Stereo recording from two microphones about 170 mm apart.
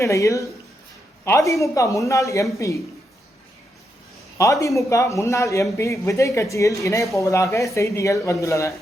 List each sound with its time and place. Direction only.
0.0 s speech: 20° left (ahead or behind)
4.6 s speech: 20° left (ahead or behind)